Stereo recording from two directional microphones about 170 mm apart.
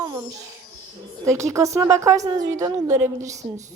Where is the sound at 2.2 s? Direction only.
45° right (ahead or behind).